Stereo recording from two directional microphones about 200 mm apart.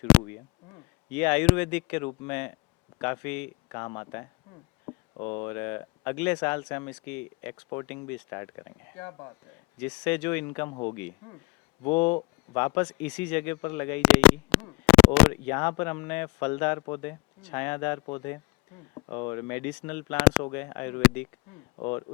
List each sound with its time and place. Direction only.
0.1 s a sound: 5° left (ahead or behind)
1.1 s speech: 10° left (ahead or behind)
9.8 s speech: 5° left (ahead or behind)
11.9 s speech: 10° left (ahead or behind)